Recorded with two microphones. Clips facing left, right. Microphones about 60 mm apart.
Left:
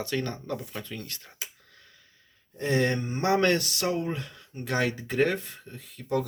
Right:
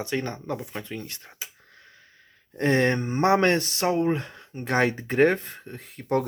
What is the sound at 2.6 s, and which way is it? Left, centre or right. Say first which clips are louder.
Speech: right 4 dB; right.